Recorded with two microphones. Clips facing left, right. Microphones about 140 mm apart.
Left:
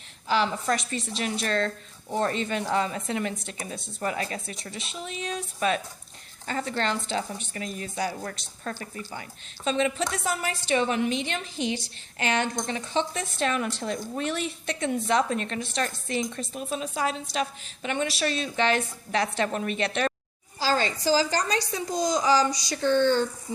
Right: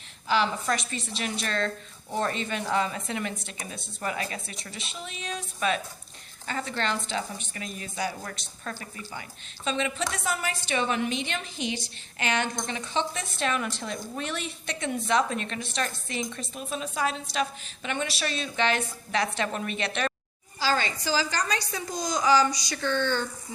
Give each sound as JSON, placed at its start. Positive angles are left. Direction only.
{"t": 0.3, "sound": "a woman's voice", "side_deg": 35}
{"t": 11.6, "sound": "a woman's voice", "side_deg": -20}
{"t": 12.2, "sound": "a woman's voice", "side_deg": 40}